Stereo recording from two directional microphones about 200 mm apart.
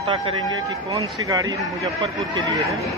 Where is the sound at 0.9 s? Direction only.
15° right (ahead or behind).